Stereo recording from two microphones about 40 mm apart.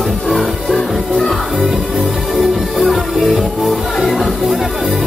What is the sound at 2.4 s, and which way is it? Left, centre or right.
Music, centre.